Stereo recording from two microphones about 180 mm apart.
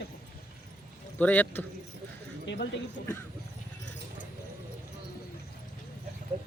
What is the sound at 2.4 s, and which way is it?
Speech, 65° left (ahead or behind).